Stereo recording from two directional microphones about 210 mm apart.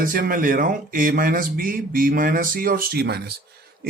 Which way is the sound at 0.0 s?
40° right (ahead or behind).